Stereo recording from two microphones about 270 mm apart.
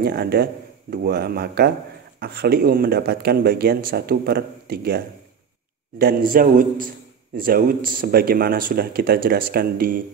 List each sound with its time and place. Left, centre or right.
0.0 s speech: right